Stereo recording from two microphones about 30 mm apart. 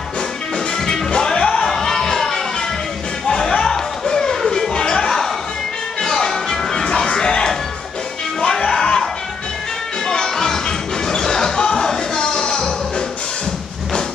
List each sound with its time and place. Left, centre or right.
0.7 s music: centre
3.3 s a sound: left
5.9 s music: centre
8.6 s a sound: centre
10.0 s music: centre
11.1 s basketball bounce: centre
12.4 s music: left